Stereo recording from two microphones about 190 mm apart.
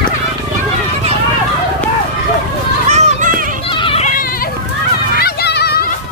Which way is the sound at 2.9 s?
35° right (ahead or behind).